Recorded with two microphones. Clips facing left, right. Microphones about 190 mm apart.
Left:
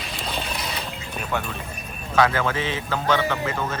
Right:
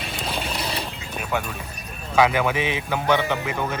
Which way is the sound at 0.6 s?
30° right (ahead or behind).